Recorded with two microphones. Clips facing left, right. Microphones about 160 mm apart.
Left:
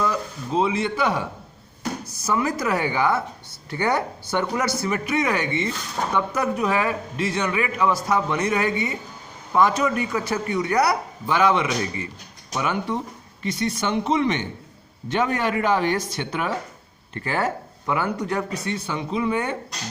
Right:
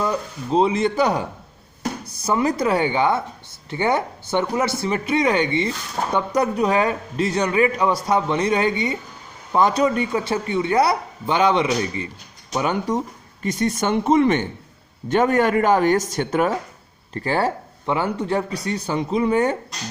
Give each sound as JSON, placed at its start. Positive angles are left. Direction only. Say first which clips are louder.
{"t": 0.0, "sound": "speech", "louder": "right 1 dB", "side_deg": -30}
{"t": 2.2, "sound": "a man's voice", "louder": "right 4 dB", "side_deg": -30}
{"t": 17.2, "sound": "a man's voice", "louder": "right 3 dB", "side_deg": -35}